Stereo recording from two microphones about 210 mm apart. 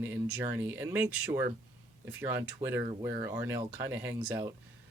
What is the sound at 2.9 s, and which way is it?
Speech, 20° right (ahead or behind).